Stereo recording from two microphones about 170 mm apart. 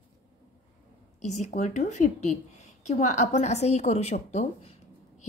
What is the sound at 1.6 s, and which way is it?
A woman's voice, 45° left (ahead or behind).